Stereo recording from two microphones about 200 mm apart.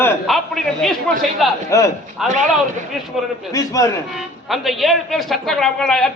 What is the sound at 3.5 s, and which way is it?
Speech, 15° left (ahead or behind).